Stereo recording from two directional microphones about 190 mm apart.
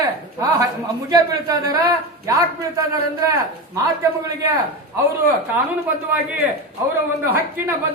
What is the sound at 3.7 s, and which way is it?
Speech, 15° right (ahead or behind).